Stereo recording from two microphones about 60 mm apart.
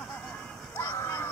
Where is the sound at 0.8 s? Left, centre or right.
Left.